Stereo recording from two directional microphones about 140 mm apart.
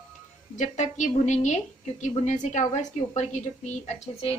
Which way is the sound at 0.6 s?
60° left (ahead or behind).